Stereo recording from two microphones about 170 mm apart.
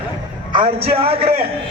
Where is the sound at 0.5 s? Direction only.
30° right (ahead or behind).